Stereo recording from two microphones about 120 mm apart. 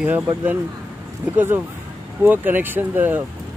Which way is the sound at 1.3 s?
20° right (ahead or behind).